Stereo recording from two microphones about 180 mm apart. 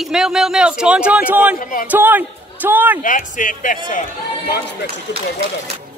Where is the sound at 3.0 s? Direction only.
45° left (ahead or behind).